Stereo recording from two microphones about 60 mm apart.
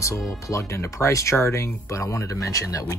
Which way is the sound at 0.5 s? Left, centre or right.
Left.